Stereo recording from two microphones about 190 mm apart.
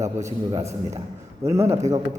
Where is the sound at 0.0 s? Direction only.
15° right (ahead or behind).